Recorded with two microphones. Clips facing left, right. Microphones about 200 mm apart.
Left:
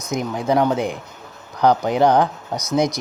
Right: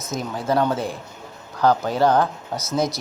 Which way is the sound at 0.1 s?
15° left (ahead or behind).